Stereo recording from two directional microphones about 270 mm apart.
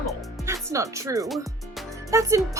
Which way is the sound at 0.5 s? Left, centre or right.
Centre.